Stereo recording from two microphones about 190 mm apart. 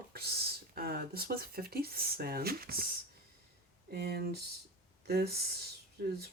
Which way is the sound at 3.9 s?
55° right (ahead or behind).